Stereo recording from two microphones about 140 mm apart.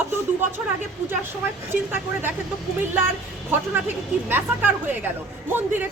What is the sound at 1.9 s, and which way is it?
Speech, 15° right (ahead or behind).